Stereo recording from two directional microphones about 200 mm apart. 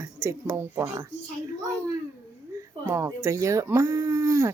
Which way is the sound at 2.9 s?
15° right (ahead or behind).